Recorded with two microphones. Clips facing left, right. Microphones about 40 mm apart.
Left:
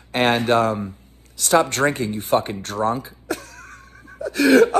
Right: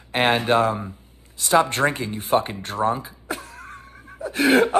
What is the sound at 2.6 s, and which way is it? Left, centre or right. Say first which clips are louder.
Speech: left 1 dB; right.